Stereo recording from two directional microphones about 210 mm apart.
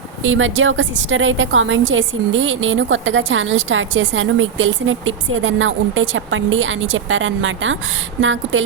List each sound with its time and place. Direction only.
0.2 s a woman's voice: 70° right (ahead or behind)